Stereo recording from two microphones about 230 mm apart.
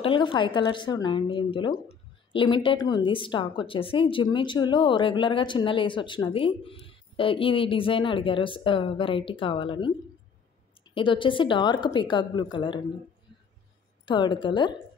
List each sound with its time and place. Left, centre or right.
0.0 s speech: left
11.0 s speech: left
14.0 s speech: centre